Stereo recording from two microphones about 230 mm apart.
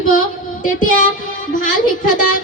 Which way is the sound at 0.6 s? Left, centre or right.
Left.